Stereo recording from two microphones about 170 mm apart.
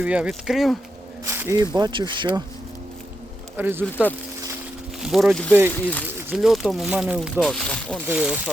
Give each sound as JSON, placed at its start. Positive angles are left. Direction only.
{"t": 0.0, "sound": "speech", "side_deg": -5}
{"t": 1.2, "sound": "speech", "side_deg": -15}
{"t": 1.7, "sound": "speech", "side_deg": -25}
{"t": 3.6, "sound": "speech", "side_deg": -10}
{"t": 6.3, "sound": "speech", "side_deg": 0}
{"t": 8.0, "sound": "speech", "side_deg": -5}